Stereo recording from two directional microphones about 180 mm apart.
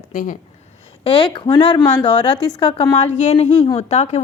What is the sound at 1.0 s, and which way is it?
Speech, 30° left (ahead or behind).